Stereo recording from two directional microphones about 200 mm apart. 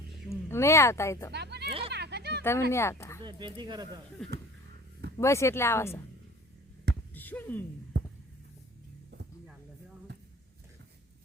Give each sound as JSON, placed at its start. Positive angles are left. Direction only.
{"t": 0.3, "sound": "speech", "side_deg": 15}
{"t": 1.3, "sound": "a sound", "side_deg": -55}
{"t": 2.4, "sound": "speech", "side_deg": 10}
{"t": 3.2, "sound": "speech", "side_deg": -25}
{"t": 5.1, "sound": "speech", "side_deg": 15}
{"t": 7.1, "sound": "a sound", "side_deg": 10}